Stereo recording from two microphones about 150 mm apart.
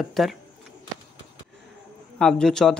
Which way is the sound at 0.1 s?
Centre (ahead or behind).